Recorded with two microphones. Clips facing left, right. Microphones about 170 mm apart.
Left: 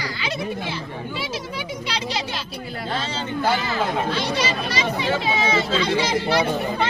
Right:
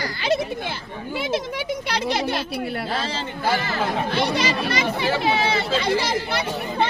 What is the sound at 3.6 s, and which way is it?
Speech, 55° right (ahead or behind).